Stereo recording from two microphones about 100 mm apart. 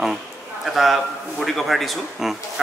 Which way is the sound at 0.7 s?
Centre (ahead or behind).